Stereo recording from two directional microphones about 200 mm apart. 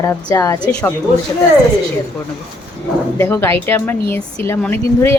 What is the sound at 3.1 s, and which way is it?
Speech, 10° left (ahead or behind).